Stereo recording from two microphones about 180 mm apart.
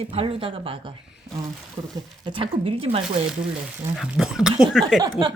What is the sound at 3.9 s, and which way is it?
Speech, 5° right (ahead or behind).